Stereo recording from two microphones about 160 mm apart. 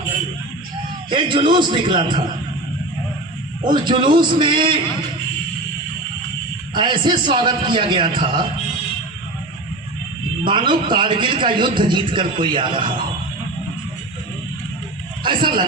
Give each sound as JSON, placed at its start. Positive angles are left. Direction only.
{"t": 1.1, "sound": "a man's voice", "side_deg": -30}
{"t": 3.6, "sound": "a man's voice", "side_deg": -30}
{"t": 6.7, "sound": "a man's voice", "side_deg": -30}
{"t": 10.4, "sound": "a man's voice", "side_deg": -30}
{"t": 15.2, "sound": "speech", "side_deg": -30}